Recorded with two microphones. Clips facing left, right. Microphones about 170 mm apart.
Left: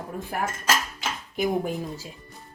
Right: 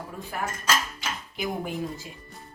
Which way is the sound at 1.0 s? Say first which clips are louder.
Left 5 dB; 45° left (ahead or behind).